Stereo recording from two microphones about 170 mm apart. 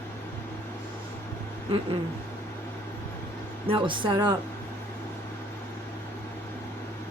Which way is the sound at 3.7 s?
30° right (ahead or behind).